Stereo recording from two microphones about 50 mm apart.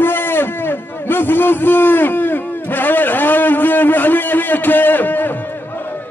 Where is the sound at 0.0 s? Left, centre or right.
Left.